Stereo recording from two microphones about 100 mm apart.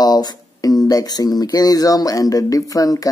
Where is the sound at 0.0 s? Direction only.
40° left (ahead or behind).